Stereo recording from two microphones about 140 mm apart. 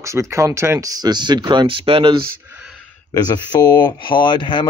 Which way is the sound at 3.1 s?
30° left (ahead or behind).